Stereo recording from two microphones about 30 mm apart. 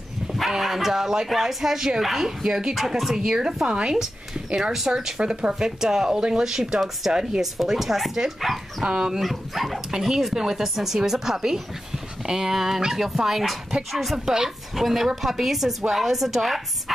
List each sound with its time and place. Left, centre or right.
0.5 s speech: centre
5.2 s speech: right
5.5 s speech: right; by 8.6 s centre
8.8 s speech: right
9.2 s speech: centre
9.8 s speech: centre
14.1 s speech: centre